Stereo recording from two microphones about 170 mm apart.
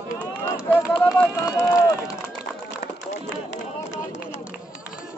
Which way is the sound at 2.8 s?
85° left.